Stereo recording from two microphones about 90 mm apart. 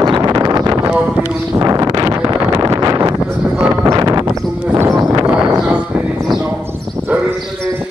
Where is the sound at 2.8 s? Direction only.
40° right (ahead or behind).